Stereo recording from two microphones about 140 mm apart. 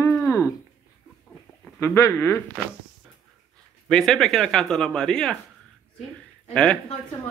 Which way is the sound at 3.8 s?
5° left (ahead or behind).